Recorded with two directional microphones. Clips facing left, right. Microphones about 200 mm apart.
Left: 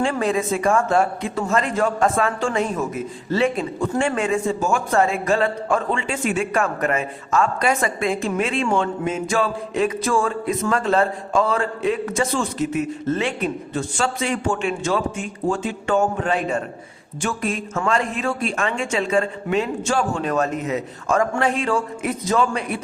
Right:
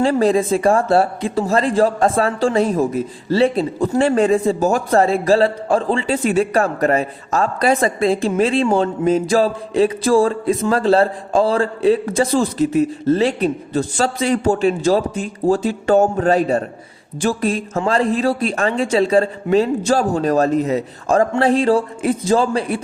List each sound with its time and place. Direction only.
0.0 s a man's voice: 35° right (ahead or behind)